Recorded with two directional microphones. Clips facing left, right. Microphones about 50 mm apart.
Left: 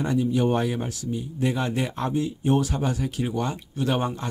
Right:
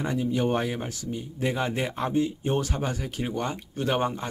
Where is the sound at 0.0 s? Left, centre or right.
Centre.